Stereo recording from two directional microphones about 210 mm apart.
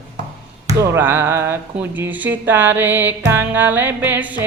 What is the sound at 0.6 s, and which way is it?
Music, 15° right (ahead or behind).